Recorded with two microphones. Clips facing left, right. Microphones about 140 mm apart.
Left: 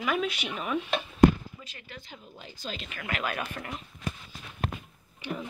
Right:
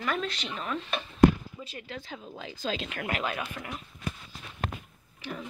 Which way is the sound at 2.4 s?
90° right.